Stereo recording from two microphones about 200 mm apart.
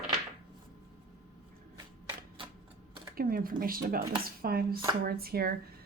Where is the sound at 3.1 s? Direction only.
45° right (ahead or behind).